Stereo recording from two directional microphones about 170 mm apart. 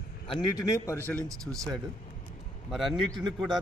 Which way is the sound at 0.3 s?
25° left (ahead or behind).